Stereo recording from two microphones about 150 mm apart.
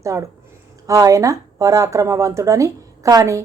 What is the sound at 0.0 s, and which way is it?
Speech, 20° right (ahead or behind).